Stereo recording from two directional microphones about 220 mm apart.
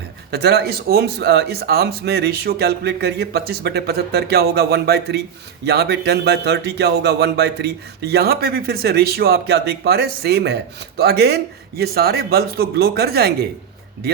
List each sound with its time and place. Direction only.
0.3 s speech: 50° right (ahead or behind)